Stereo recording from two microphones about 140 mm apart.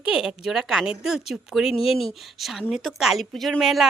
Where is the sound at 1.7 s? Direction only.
45° left (ahead or behind).